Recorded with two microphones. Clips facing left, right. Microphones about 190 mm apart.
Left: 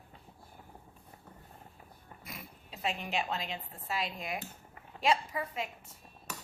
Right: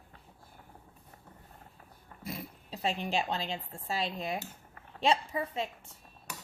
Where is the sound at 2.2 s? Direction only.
30° right (ahead or behind).